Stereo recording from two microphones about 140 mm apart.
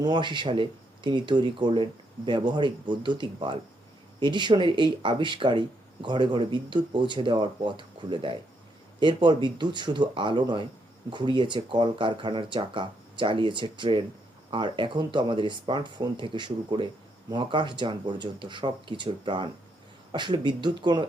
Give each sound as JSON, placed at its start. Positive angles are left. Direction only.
{"t": 0.0, "sound": "speech", "side_deg": -30}